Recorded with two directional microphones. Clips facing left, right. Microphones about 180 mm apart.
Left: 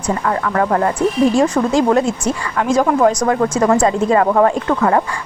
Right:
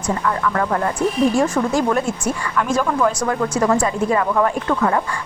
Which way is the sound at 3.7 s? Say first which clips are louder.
Left 4 dB; 50° left (ahead or behind).